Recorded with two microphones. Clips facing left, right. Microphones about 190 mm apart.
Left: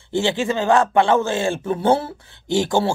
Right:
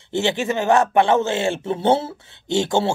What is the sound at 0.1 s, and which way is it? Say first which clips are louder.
A man's voice: left 1 dB; 20° right (ahead or behind).